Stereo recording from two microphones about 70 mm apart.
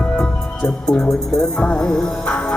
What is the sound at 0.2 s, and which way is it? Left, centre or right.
Music, centre.